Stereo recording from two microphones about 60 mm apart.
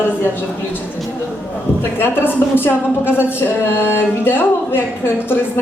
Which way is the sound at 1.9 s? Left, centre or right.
Left.